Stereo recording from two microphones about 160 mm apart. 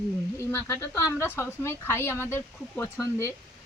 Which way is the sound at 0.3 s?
15° left (ahead or behind).